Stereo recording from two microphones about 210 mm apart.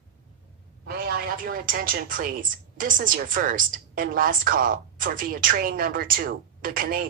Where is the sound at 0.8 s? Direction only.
45° right (ahead or behind).